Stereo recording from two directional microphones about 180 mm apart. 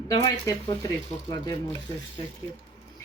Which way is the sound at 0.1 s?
20° left (ahead or behind).